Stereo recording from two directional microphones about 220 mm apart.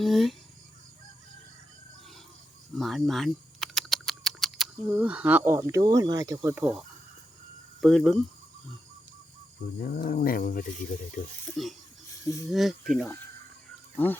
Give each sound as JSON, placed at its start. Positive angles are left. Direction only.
{"t": 0.0, "sound": "speech", "side_deg": 0}
{"t": 2.7, "sound": "speech", "side_deg": 0}
{"t": 9.7, "sound": "speech", "side_deg": 40}
{"t": 12.5, "sound": "speech", "side_deg": 0}